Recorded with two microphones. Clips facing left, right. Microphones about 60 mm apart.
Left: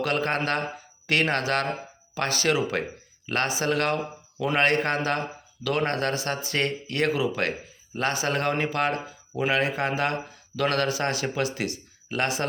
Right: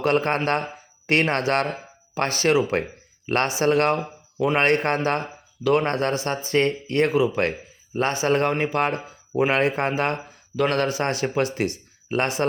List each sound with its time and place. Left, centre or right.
0.0 s speech: right